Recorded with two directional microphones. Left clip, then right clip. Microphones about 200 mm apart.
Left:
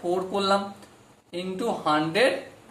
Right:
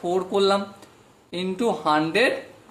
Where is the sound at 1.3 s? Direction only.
40° right (ahead or behind).